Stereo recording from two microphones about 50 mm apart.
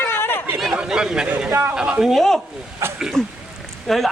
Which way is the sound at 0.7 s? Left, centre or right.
Centre.